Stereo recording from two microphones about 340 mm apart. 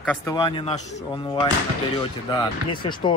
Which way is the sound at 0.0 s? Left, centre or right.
Centre.